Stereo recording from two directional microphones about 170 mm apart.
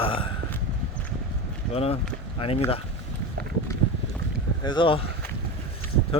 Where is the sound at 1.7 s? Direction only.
35° left (ahead or behind).